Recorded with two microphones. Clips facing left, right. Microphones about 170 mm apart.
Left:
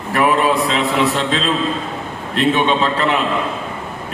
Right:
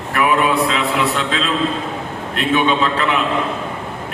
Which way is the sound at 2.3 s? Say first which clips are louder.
Left 1 dB; 30° left (ahead or behind).